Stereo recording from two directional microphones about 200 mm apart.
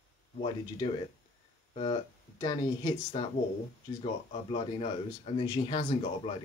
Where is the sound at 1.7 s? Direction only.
25° left (ahead or behind).